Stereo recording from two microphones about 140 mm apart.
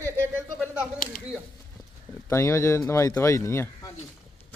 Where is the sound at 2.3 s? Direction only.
20° left (ahead or behind).